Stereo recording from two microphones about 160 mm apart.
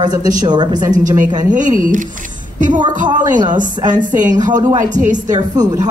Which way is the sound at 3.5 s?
55° right (ahead or behind).